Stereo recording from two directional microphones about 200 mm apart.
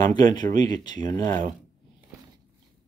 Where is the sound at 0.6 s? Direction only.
20° left (ahead or behind).